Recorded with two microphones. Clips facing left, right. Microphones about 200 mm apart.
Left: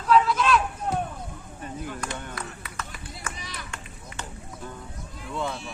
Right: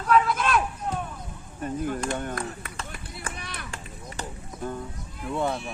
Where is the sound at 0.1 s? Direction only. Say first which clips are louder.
Left 2 dB; 50° right (ahead or behind).